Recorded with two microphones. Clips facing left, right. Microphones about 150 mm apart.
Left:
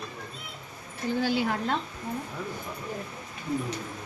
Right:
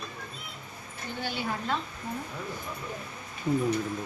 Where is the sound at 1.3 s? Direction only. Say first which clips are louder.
Left 3 dB; 90° left.